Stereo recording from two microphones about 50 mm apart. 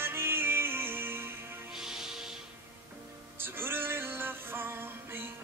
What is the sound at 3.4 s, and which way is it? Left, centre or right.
Music, right.